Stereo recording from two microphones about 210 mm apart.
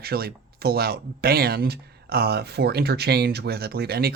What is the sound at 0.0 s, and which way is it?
Speech, 45° right (ahead or behind).